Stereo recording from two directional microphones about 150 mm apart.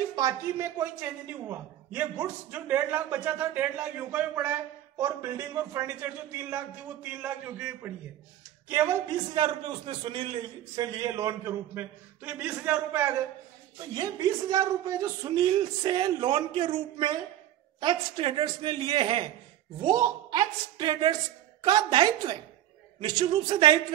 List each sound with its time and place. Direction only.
0.1 s a woman's voice: 25° right (ahead or behind)
9.3 s a man's voice: 35° right (ahead or behind); by 13.1 s 15° right (ahead or behind)
13.7 s a man's voice: 30° right (ahead or behind)
19.8 s a man's voice: 25° right (ahead or behind)